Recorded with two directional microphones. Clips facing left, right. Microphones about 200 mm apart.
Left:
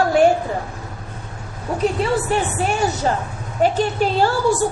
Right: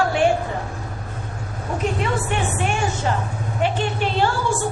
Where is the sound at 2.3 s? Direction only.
35° left (ahead or behind).